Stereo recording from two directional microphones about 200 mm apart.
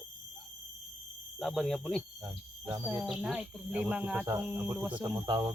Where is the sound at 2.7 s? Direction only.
10° right (ahead or behind).